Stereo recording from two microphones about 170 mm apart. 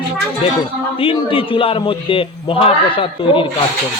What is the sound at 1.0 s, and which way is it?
Speech, 30° left (ahead or behind).